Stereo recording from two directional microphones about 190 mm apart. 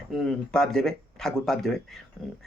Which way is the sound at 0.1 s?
Centre (ahead or behind).